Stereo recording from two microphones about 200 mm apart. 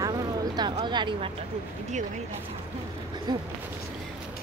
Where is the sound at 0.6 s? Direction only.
20° right (ahead or behind).